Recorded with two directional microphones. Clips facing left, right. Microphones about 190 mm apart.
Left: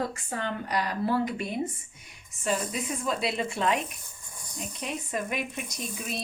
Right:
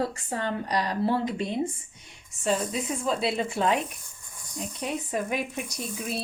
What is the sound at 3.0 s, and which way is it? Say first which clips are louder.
Speech: right 2 dB; 30° right (ahead or behind).